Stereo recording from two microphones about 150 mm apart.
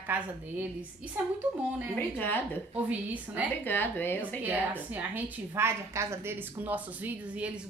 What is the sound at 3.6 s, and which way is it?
Speech, 15° left (ahead or behind).